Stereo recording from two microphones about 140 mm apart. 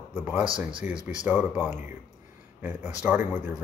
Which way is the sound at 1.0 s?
10° right (ahead or behind).